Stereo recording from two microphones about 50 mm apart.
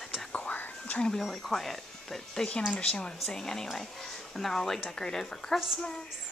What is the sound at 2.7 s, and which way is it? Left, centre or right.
Speech, centre.